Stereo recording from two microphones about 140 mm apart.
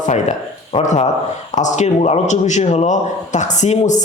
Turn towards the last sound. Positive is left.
turn(degrees=55)  # may be behind; listen again after turning